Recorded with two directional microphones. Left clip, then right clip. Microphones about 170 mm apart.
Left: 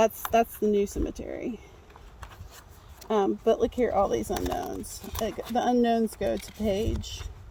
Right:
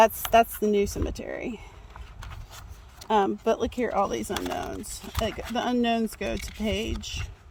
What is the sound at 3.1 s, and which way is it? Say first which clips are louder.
Speech: right 1 dB; 45° right (ahead or behind).